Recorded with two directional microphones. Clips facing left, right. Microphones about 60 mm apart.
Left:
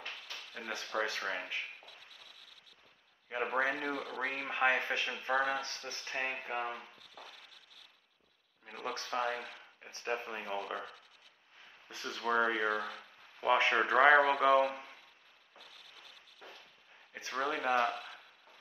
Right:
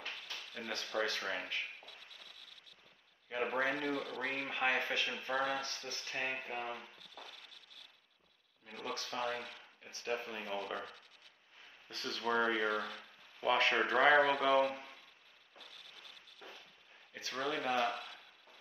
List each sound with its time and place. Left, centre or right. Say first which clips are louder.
0.6 s speech: left 1 dB; centre
3.3 s speech: left 2 dB; left
6.8 s a sound: left 1 dB; left
8.6 s speech: left 3 dB; left
10.5 s speech: left 2 dB; centre
11.9 s speech: left 2 dB; centre
12.6 s speech: left 2 dB; left
17.1 s speech: left 3 dB; left